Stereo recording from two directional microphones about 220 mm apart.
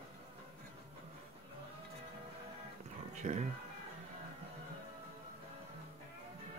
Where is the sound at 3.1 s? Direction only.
30° right (ahead or behind).